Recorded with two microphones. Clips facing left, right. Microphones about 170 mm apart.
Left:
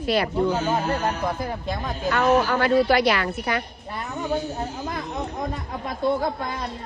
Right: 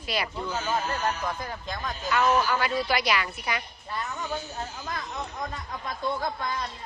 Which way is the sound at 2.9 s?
15° right (ahead or behind).